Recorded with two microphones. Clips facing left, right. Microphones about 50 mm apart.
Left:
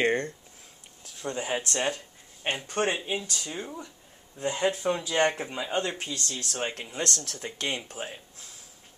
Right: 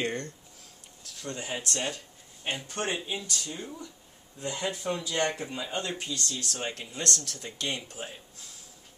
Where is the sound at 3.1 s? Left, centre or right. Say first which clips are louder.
Left 3 dB; left.